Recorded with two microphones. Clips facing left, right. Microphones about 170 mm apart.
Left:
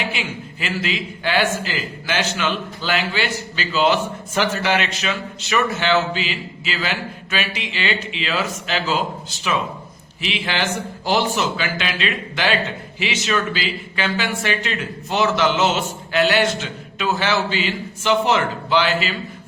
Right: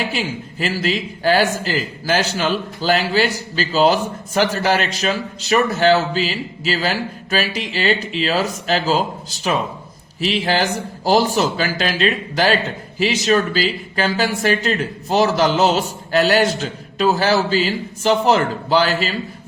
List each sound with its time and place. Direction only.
0.0 s a man's voice: 40° right (ahead or behind)